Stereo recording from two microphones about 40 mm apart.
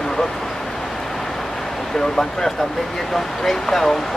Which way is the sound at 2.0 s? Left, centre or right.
Centre.